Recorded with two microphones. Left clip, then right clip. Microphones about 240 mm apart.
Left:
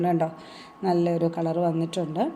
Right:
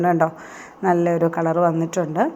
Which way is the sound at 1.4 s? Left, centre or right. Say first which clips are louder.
Right 7 dB; centre.